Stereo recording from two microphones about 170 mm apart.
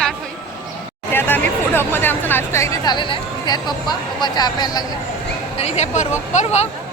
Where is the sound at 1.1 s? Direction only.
15° left (ahead or behind).